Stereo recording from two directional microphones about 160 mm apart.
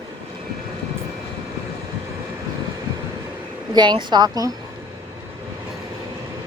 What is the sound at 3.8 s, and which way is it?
Speech, 30° right (ahead or behind).